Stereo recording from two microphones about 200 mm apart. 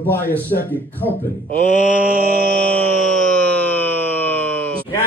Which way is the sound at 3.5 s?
10° left (ahead or behind).